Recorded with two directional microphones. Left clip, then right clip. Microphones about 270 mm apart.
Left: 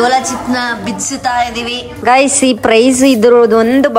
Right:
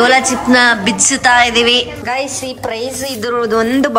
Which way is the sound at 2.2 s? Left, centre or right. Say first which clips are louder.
Left 9 dB; left.